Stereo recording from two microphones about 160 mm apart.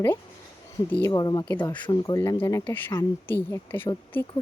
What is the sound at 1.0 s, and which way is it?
Speech, 25° left (ahead or behind).